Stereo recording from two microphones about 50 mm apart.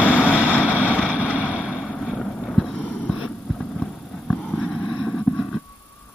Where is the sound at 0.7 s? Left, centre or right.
Right.